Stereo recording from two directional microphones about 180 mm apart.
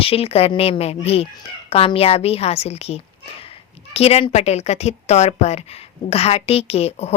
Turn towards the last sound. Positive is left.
turn(degrees=35)  # may be behind; listen again after turning